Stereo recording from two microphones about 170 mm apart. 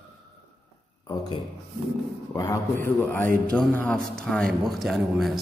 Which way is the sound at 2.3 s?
20° left (ahead or behind).